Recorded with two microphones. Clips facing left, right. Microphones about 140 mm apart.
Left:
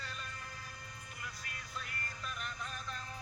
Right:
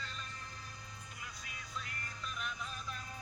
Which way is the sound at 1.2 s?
Centre (ahead or behind).